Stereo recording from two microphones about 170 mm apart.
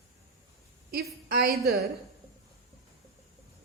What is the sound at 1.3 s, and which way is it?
Speech, 65° right (ahead or behind).